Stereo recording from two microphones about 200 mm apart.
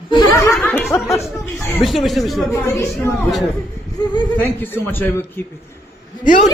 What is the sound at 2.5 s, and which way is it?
Speech, 15° left (ahead or behind).